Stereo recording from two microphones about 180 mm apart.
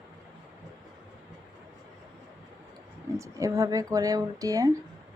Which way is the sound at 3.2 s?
15° right (ahead or behind).